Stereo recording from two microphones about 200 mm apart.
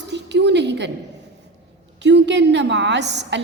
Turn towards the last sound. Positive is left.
turn(degrees=-60)  # may be behind; listen again after turning